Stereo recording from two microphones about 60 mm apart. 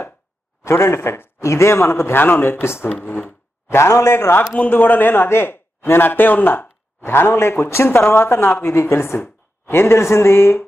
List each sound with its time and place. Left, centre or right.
0.7 s a man's voice: left
4.6 s a man's voice: left
8.6 s a man's voice: left